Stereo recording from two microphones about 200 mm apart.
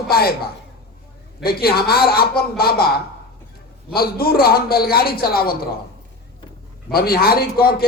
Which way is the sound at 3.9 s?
50° left (ahead or behind).